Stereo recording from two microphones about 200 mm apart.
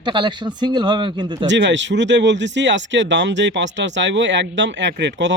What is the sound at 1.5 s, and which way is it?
Speech, 60° right (ahead or behind).